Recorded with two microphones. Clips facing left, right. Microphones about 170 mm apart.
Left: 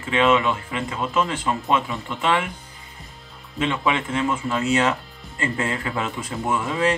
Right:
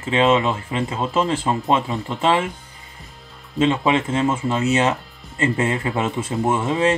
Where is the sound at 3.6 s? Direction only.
25° right (ahead or behind).